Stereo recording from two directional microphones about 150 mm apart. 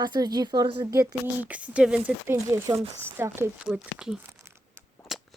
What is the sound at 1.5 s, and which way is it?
Speech, 10° right (ahead or behind).